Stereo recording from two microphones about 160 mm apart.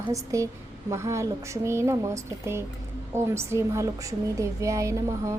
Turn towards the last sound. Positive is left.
turn(degrees=-20)  # may be behind; listen again after turning